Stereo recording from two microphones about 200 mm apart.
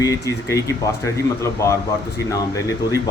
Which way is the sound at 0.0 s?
15° left (ahead or behind).